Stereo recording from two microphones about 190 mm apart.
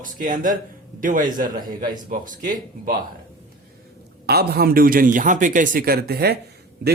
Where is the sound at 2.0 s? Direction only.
45° right (ahead or behind).